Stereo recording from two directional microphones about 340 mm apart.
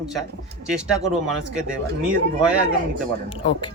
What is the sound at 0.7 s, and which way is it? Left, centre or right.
Speech, centre.